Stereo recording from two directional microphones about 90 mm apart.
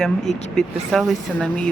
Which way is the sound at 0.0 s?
5° left (ahead or behind).